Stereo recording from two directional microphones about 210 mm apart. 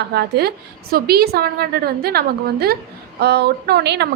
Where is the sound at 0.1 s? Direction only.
50° right (ahead or behind).